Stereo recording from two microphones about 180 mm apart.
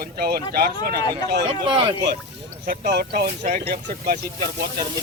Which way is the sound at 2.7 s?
60° right (ahead or behind).